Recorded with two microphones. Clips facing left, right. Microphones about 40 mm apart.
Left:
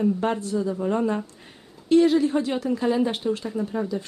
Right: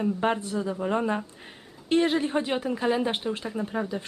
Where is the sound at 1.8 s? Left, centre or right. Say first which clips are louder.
Left 5 dB; right.